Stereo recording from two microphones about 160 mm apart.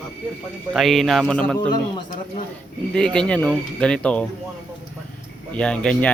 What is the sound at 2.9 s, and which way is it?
Speech, 5° left (ahead or behind).